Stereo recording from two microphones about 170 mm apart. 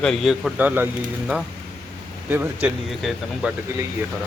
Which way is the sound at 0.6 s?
10° right (ahead or behind).